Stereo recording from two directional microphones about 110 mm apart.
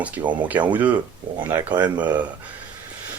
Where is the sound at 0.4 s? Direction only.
15° right (ahead or behind).